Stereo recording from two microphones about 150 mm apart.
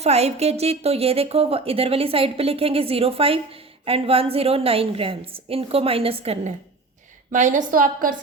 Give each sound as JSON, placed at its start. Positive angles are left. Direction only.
{"t": 0.0, "sound": "a woman's voice", "side_deg": -45}
{"t": 7.3, "sound": "a woman's voice", "side_deg": -60}